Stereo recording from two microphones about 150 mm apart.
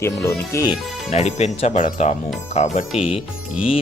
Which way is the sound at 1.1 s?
50° left (ahead or behind).